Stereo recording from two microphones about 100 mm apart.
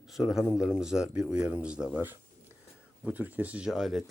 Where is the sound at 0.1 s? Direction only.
5° right (ahead or behind).